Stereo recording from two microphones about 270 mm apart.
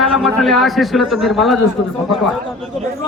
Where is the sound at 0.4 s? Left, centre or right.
Centre.